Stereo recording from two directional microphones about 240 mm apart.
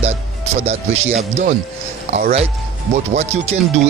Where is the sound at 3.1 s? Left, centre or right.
Right.